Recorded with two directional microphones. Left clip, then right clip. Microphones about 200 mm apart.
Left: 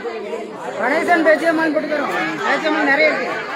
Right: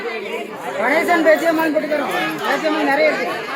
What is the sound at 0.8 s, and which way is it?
Chatter, 15° right (ahead or behind).